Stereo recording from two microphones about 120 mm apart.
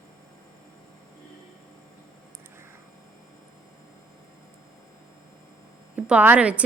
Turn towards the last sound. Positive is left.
turn(degrees=-10)  # may be behind; listen again after turning